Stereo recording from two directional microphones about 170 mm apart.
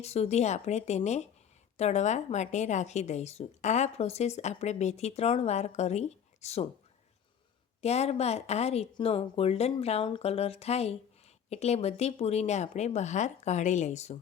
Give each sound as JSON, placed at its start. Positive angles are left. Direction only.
{"t": 0.0, "sound": "a woman's voice", "side_deg": 40}
{"t": 7.8, "sound": "a woman's voice", "side_deg": 40}